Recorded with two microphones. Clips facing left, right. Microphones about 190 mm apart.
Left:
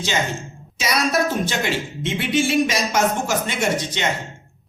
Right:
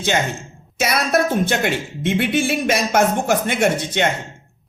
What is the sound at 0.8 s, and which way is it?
Speech, 55° right (ahead or behind).